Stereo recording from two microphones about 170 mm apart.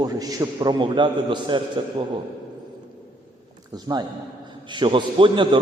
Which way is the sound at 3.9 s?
20° right (ahead or behind).